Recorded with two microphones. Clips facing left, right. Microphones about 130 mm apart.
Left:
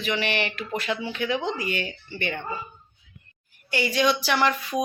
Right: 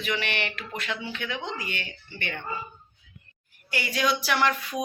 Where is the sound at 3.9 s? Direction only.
Centre (ahead or behind).